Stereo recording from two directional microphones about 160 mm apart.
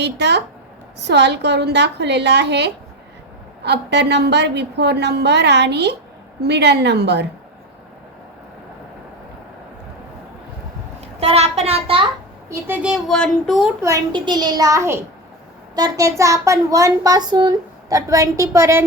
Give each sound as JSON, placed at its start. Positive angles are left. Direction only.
{"t": 0.0, "sound": "a woman's voice", "side_deg": -90}
{"t": 11.2, "sound": "a child's voice", "side_deg": -40}
{"t": 12.5, "sound": "speech", "side_deg": -15}
{"t": 13.8, "sound": "a child's voice", "side_deg": -25}